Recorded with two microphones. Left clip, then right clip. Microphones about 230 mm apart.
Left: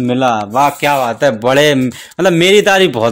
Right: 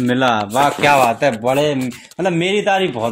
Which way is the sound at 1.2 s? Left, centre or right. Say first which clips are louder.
Left 5 dB; left.